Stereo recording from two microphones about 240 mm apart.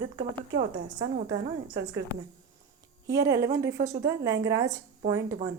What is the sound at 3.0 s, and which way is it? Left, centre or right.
A woman's voice, centre.